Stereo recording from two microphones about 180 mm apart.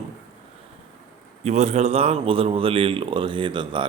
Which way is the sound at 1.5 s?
40° right (ahead or behind).